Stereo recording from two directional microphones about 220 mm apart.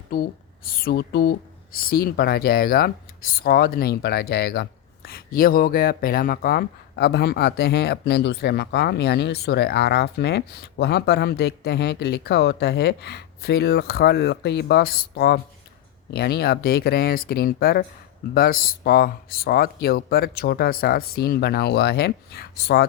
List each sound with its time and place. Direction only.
0.1 s speech: 40° left (ahead or behind)